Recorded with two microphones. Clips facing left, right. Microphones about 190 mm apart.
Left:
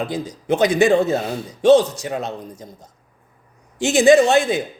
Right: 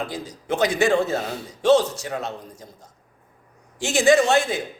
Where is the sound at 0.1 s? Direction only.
20° left (ahead or behind).